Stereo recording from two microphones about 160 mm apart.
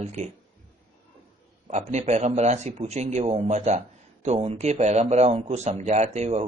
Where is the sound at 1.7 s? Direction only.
45° right (ahead or behind).